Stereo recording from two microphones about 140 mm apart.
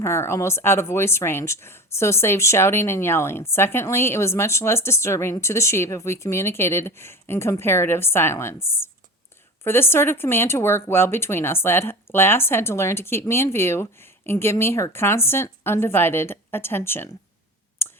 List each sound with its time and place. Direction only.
0.0 s speech: 20° left (ahead or behind)